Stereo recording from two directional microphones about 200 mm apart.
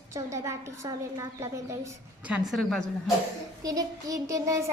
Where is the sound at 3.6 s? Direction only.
15° right (ahead or behind).